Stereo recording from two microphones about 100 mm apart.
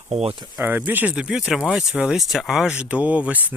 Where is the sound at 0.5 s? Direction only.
20° right (ahead or behind).